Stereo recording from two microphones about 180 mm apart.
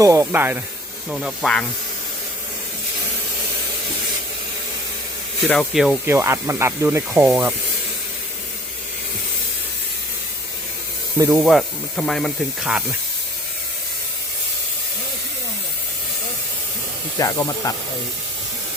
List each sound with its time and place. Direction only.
0.0 s speech: 15° right (ahead or behind); by 1.6 s 5° left (ahead or behind)
5.5 s speech: centre (ahead or behind)
6.1 s speech: 15° right (ahead or behind)
11.3 s speech: centre (ahead or behind)
17.2 s speech: 20° left (ahead or behind)